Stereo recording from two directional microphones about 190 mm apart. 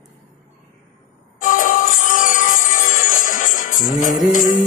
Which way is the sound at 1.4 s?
45° left (ahead or behind).